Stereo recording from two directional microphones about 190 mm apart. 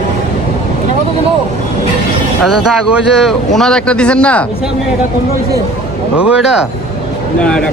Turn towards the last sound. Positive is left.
turn(degrees=-5)  # may be behind; listen again after turning